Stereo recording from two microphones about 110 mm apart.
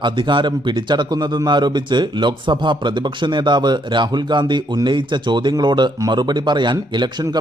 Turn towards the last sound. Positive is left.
turn(degrees=-45)  # may be behind; listen again after turning